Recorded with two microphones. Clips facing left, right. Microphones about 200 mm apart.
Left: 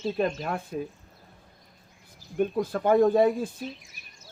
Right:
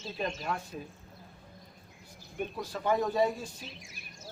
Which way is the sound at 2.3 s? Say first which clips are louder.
Left 10 dB; 55° left (ahead or behind).